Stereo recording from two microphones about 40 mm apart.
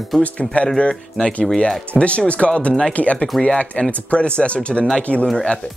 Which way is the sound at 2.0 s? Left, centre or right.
Left.